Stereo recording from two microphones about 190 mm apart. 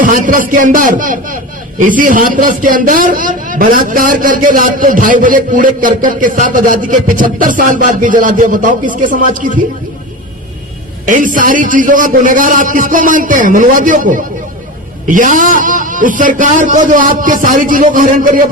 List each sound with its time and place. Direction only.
0.0 s a man's voice: 45° right (ahead or behind)
11.0 s a man's voice: 45° right (ahead or behind)